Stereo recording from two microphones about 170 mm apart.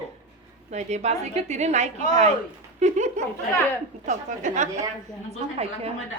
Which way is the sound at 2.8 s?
45° right (ahead or behind).